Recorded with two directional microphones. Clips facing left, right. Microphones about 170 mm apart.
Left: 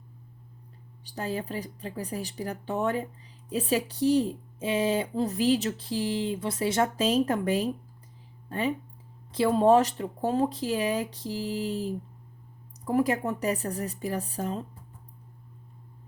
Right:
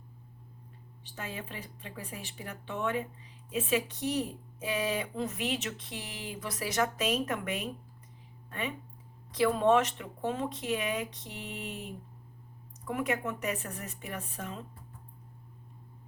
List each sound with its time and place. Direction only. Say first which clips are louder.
1.0 s speech: left 9 dB; 35° left (ahead or behind)